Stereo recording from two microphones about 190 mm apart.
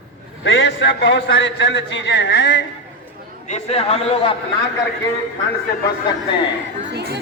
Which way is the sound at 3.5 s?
35° left (ahead or behind).